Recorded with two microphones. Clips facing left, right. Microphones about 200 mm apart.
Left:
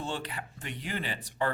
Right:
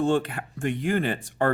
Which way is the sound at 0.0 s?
50° right (ahead or behind).